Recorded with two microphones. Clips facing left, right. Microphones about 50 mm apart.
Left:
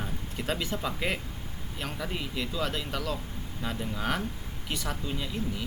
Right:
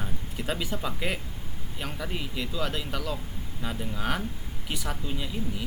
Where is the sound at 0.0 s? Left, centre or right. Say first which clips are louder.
Even; centre.